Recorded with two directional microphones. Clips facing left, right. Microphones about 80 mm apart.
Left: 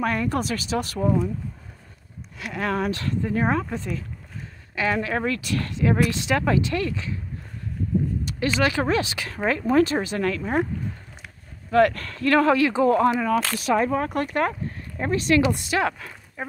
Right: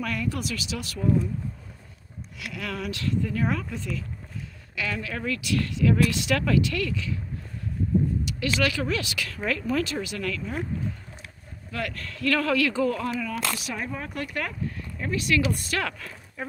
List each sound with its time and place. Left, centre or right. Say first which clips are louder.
0.0 s speech: left 6 dB; left
2.3 s speech: left 8 dB; left
8.3 s speech: left 3 dB; left
11.7 s speech: left 14 dB; left
12.2 s speech: left 5 dB; left
13.2 s speech: left 7 dB; left
14.2 s speech: left 7 dB; left
15.6 s speech: left 6 dB; centre